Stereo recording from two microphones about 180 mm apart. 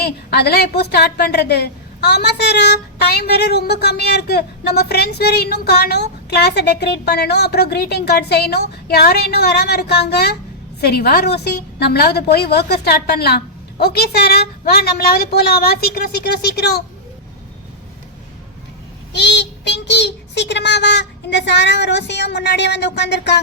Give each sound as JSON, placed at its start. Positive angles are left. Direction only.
{"t": 0.0, "sound": "a woman's voice", "side_deg": 65}
{"t": 19.1, "sound": "a child's voice", "side_deg": 75}